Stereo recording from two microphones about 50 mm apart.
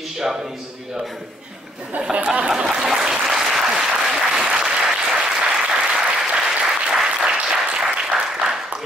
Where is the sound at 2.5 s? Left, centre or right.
Centre.